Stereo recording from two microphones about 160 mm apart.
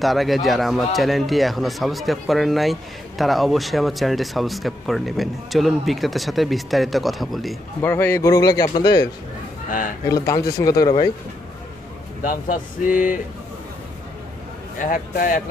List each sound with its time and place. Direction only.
0.0 s speech: centre (ahead or behind)
7.8 s a man's voice: 15° left (ahead or behind)
9.7 s a man's voice: 60° left (ahead or behind)
10.0 s a man's voice: 20° left (ahead or behind)
12.9 s a man's voice: 60° left (ahead or behind)
14.8 s a man's voice: 60° left (ahead or behind)